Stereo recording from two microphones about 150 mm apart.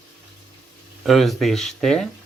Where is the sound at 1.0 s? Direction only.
Centre (ahead or behind).